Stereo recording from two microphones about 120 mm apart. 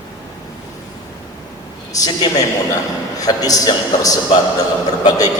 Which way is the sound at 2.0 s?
30° left (ahead or behind).